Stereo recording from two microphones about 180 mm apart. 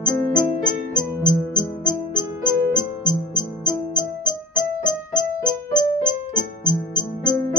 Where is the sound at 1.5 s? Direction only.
25° left (ahead or behind).